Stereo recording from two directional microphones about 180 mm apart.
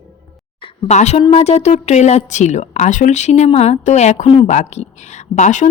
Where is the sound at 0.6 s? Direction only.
40° left (ahead or behind).